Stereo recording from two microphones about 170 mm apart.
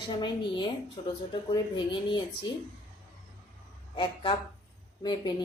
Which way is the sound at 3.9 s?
25° left (ahead or behind).